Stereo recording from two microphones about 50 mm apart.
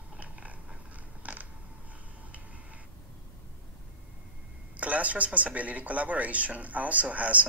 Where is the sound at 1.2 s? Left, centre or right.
Right.